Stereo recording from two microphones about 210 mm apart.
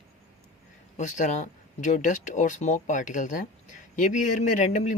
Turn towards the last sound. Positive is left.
turn(degrees=35)  # may be behind; listen again after turning